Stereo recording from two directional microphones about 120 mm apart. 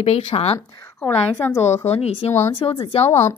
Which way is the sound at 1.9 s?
55° left (ahead or behind).